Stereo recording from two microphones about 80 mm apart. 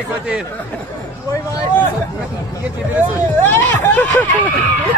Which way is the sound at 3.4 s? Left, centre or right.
Left.